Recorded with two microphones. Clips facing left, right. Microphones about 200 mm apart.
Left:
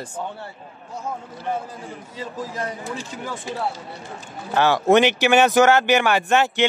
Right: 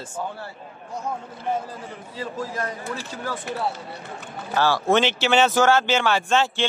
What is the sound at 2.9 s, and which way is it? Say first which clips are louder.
Speech: even; 15° left (ahead or behind).